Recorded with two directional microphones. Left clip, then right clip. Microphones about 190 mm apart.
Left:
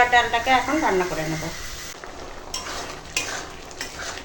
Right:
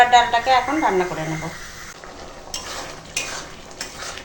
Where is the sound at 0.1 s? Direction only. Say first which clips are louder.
Right 4 dB; 20° right (ahead or behind).